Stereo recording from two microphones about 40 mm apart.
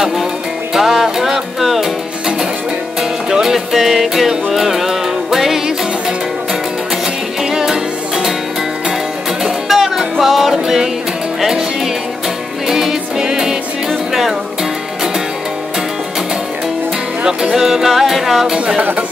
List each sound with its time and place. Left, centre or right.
0.7 s music: centre
3.0 s music: centre
7.4 s music: centre
9.4 s music: centre
17.2 s music: centre